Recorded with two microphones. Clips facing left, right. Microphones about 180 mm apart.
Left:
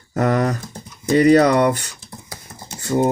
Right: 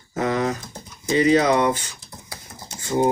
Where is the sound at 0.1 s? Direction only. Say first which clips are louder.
Left 4 dB; 55° left (ahead or behind).